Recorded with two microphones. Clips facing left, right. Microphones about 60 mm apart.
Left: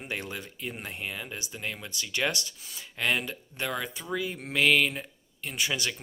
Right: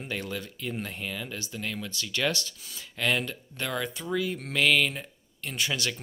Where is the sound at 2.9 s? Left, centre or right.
Centre.